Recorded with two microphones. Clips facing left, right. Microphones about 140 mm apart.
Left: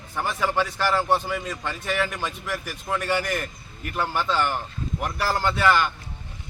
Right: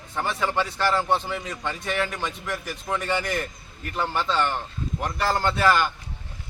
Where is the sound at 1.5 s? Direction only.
20° right (ahead or behind).